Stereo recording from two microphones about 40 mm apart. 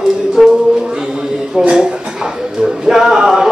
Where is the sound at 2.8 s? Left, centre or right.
Centre.